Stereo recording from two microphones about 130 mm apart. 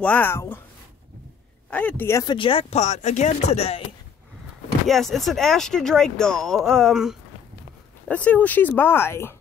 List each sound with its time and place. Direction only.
0.0 s speech: 15° left (ahead or behind)
1.7 s speech: 10° left (ahead or behind)
2.2 s speech: 40° left (ahead or behind)
2.7 s speech: 65° left (ahead or behind)
4.8 s speech: centre (ahead or behind)
8.1 s speech: 10° left (ahead or behind)